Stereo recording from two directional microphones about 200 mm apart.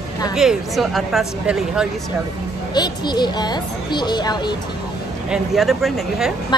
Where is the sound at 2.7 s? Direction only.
20° left (ahead or behind).